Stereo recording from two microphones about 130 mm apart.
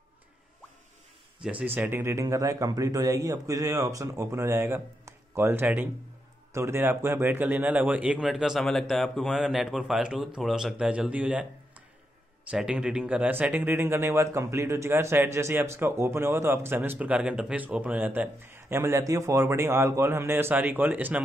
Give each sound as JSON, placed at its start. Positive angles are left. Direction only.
{"t": 1.4, "sound": "speech", "side_deg": -10}
{"t": 12.4, "sound": "speech", "side_deg": -10}